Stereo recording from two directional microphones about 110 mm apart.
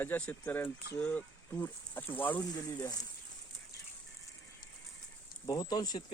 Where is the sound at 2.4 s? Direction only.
35° left (ahead or behind).